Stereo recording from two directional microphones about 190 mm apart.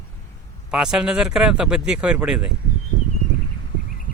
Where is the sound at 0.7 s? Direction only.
5° right (ahead or behind).